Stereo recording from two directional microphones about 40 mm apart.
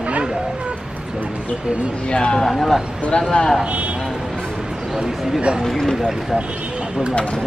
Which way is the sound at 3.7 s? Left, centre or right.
Right.